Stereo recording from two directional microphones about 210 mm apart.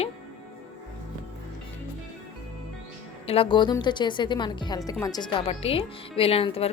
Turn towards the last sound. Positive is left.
turn(degrees=25)  # may be behind; listen again after turning